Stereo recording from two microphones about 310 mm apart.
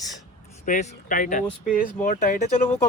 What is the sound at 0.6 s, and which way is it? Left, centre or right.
Speech, left.